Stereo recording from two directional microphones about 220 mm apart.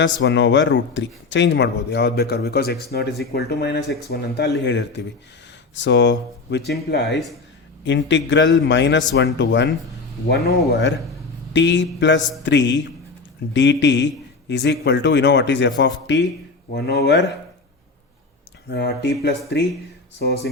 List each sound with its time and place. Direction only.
0.0 s a man's voice: 55° left (ahead or behind)
18.7 s speech: 50° left (ahead or behind)
20.1 s speech: 45° left (ahead or behind)